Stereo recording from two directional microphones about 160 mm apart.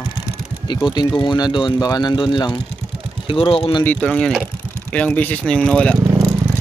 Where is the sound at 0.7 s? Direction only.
30° left (ahead or behind).